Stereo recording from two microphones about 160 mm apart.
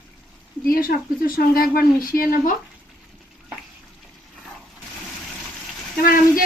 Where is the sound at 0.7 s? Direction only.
65° left (ahead or behind).